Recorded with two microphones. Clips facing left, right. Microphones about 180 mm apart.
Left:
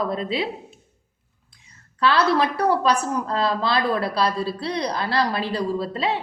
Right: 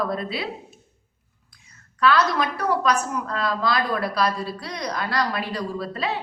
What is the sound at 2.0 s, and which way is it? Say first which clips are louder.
Speech: left 1 dB; 30° left (ahead or behind).